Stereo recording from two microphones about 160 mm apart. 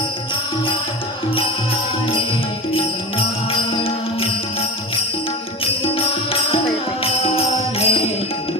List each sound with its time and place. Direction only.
2.7 s music: 35° left (ahead or behind)
6.5 s music: 35° left (ahead or behind)